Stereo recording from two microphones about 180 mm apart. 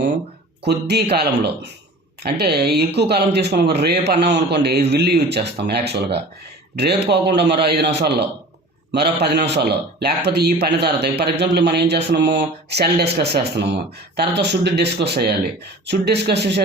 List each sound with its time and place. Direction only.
0.6 s a man's voice: 65° right (ahead or behind)